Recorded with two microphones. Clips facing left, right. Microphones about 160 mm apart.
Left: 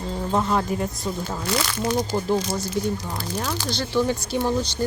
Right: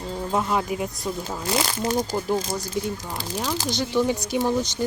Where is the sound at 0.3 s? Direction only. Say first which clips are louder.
Left 2 dB; 5° right (ahead or behind).